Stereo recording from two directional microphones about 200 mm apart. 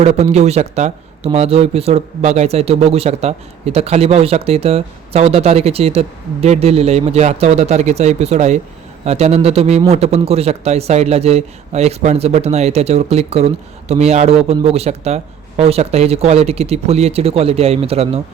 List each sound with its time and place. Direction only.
0.0 s speech: 30° right (ahead or behind)